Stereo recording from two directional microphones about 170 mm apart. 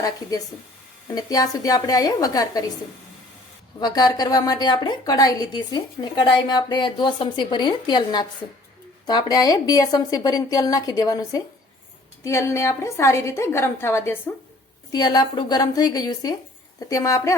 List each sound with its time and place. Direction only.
0.0 s a woman's voice: 20° left (ahead or behind)
3.8 s a woman's voice: 25° left (ahead or behind)